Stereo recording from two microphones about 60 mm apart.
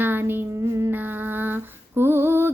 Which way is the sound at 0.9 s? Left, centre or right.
Right.